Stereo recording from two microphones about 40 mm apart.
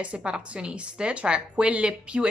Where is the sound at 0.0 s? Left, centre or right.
Right.